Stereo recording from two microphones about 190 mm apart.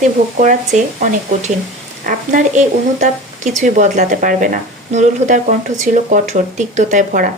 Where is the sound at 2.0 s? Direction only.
40° right (ahead or behind).